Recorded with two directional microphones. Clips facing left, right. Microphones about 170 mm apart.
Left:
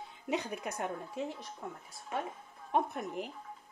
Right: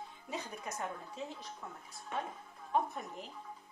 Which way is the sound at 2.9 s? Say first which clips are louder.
Left 6 dB; 65° left (ahead or behind).